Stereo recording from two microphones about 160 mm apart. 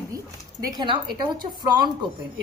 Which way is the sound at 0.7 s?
25° right (ahead or behind).